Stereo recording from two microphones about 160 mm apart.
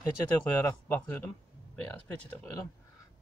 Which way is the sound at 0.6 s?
10° left (ahead or behind).